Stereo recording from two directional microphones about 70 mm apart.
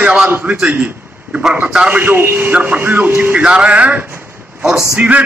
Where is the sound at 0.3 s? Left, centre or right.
Right.